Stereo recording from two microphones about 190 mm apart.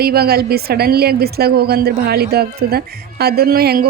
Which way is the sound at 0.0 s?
55° right (ahead or behind).